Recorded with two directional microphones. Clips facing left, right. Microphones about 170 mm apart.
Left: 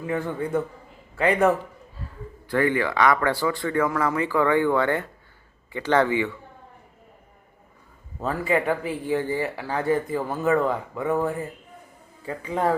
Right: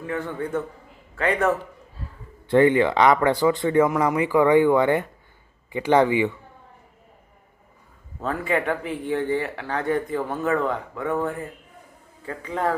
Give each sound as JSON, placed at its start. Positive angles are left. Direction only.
{"t": 0.1, "sound": "a man's voice", "side_deg": 10}
{"t": 2.5, "sound": "speech", "side_deg": -25}
{"t": 8.2, "sound": "speech", "side_deg": 5}